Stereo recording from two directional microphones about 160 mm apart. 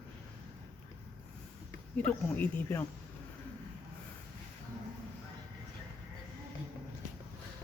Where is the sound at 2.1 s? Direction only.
10° left (ahead or behind).